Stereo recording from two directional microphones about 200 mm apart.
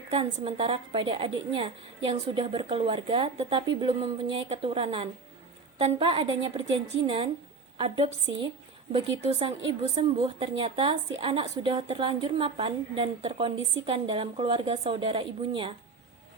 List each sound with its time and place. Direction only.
0.1 s a woman's voice: 30° right (ahead or behind)